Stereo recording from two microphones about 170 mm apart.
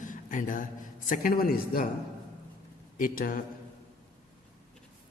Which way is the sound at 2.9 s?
55° left (ahead or behind).